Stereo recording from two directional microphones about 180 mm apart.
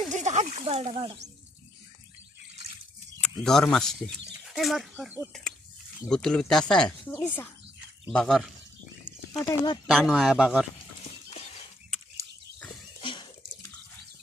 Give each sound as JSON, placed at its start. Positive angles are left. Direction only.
{"t": 0.1, "sound": "speech", "side_deg": -40}
{"t": 3.2, "sound": "speech", "side_deg": 5}
{"t": 9.4, "sound": "speech", "side_deg": 20}
{"t": 9.8, "sound": "speech", "side_deg": 0}
{"t": 13.0, "sound": "water", "side_deg": 30}